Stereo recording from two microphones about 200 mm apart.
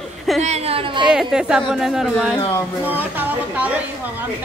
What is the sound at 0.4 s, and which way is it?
Speech, 30° right (ahead or behind).